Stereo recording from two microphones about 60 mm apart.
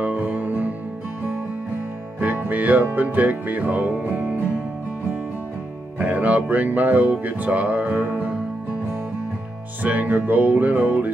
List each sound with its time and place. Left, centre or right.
0.0 s music: right
2.1 s music: right
5.9 s music: right
9.8 s music: right